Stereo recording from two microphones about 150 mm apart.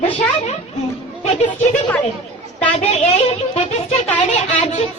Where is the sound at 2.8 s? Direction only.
45° left (ahead or behind).